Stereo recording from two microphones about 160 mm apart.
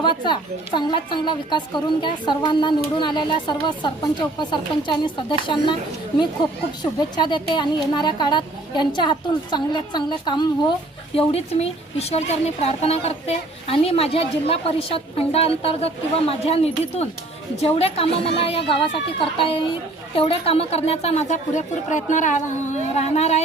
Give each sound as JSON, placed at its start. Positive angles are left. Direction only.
{"t": 0.0, "sound": "a woman's voice", "side_deg": 30}
{"t": 7.2, "sound": "a woman's voice", "side_deg": 30}